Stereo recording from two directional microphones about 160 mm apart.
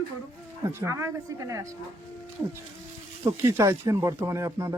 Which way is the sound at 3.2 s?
15° right (ahead or behind).